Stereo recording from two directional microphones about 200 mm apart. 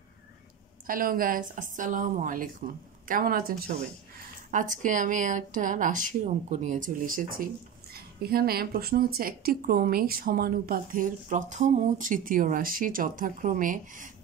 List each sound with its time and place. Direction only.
0.8 s a woman's voice: 45° right (ahead or behind)